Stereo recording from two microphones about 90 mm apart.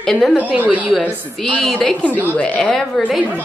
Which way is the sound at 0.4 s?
15° right (ahead or behind).